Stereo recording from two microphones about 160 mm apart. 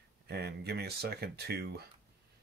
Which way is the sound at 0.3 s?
90° right.